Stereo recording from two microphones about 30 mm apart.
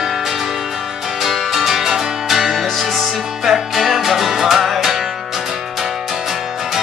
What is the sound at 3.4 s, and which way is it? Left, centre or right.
Music, centre.